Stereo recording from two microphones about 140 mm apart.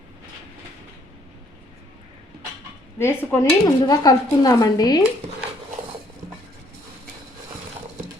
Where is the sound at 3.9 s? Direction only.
25° left (ahead or behind).